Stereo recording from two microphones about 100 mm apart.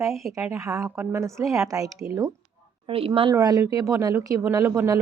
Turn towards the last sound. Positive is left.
turn(degrees=-30)  # may be behind; listen again after turning